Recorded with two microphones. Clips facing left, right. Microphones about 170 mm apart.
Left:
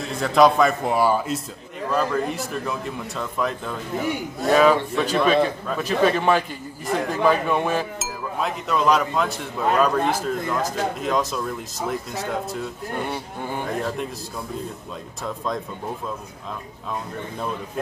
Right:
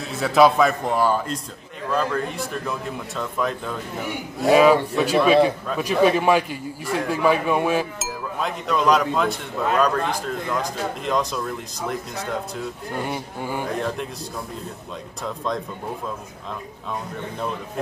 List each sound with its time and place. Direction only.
0.1 s a man's voice: 5° right (ahead or behind)
13.0 s a man's voice: 10° right (ahead or behind)
13.7 s a man's voice: 5° left (ahead or behind)
15.2 s a man's voice: centre (ahead or behind)